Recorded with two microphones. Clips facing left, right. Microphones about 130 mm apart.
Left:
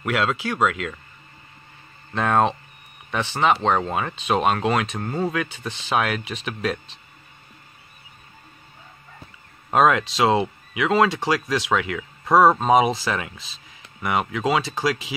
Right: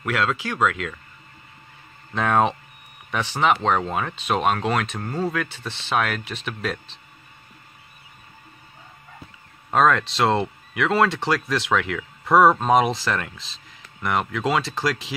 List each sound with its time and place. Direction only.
0.0 s speech: 5° left (ahead or behind)
2.1 s speech: centre (ahead or behind)
9.7 s speech: 5° left (ahead or behind)